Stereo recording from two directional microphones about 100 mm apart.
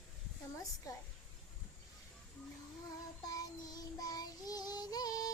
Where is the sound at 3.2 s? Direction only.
40° left (ahead or behind).